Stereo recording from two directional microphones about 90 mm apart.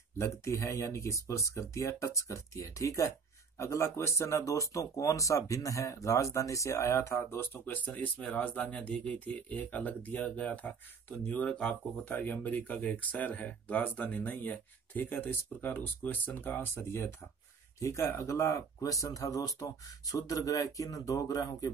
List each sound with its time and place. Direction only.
0.2 s speech: 30° left (ahead or behind)